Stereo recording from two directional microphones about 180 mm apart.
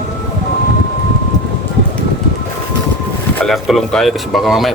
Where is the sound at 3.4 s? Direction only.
Centre (ahead or behind).